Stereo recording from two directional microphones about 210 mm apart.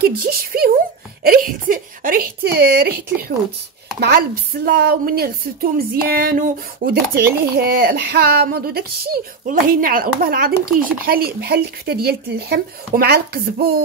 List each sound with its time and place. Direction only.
0.0 s speech: 45° right (ahead or behind)
1.2 s a sound: 45° right (ahead or behind)
4.6 s speech: 45° right (ahead or behind)